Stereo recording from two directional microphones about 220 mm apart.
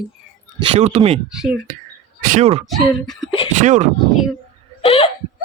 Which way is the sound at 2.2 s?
35° right (ahead or behind).